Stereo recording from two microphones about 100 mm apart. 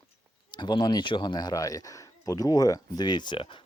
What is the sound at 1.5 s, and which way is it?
Speech, 35° left (ahead or behind).